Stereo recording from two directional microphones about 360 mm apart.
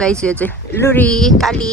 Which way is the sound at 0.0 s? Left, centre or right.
Centre.